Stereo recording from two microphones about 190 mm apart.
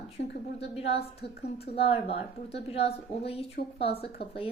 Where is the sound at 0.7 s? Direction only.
30° left (ahead or behind).